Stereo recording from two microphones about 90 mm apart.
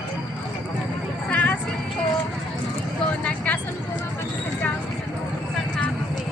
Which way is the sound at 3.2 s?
15° left (ahead or behind).